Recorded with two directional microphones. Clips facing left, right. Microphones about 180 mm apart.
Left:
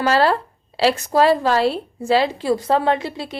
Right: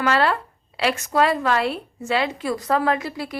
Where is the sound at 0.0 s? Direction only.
35° left (ahead or behind).